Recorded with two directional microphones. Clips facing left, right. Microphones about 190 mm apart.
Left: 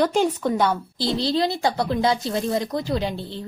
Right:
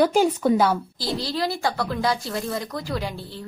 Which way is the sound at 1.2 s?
20° left (ahead or behind).